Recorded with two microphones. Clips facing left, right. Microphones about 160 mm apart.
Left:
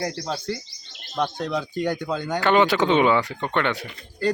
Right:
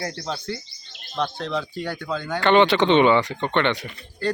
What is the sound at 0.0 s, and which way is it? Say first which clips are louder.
Speech: left 2 dB; 5° left (ahead or behind).